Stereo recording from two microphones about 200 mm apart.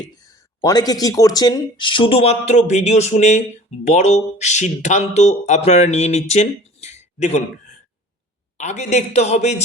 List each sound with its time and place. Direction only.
0.1 s speech: 20° left (ahead or behind); by 9.6 s 35° left (ahead or behind)